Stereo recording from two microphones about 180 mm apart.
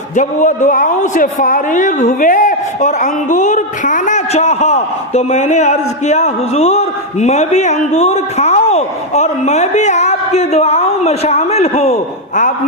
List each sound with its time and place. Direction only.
0.2 s speech: 45° left (ahead or behind)